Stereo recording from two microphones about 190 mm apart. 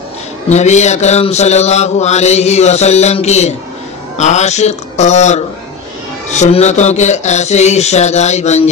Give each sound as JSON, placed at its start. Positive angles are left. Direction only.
{"t": 0.5, "sound": "mantra", "side_deg": 35}